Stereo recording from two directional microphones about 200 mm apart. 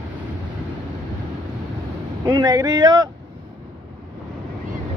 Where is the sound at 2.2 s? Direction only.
20° right (ahead or behind).